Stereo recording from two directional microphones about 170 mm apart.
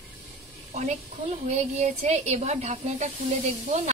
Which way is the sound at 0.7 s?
45° right (ahead or behind).